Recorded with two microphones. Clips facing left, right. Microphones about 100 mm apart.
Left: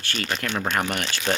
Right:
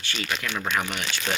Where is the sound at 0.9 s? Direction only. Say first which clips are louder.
Left 3 dB; 50° left (ahead or behind).